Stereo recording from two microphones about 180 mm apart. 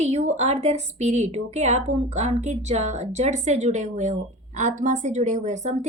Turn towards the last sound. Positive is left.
turn(degrees=-40)  # may be behind; listen again after turning